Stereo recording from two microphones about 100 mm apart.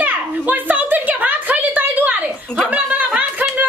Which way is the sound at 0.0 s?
15° right (ahead or behind).